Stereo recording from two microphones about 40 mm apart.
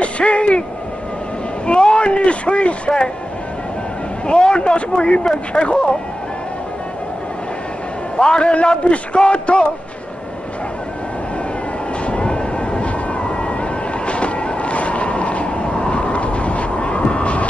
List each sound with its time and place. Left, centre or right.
0.0 s a sound: left
1.7 s a man's voice: left
4.3 s a man's voice: left
8.2 s a man's voice: left
12.1 s vehicle: left